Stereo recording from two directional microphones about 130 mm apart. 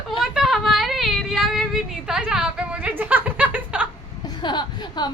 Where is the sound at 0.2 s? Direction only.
5° right (ahead or behind).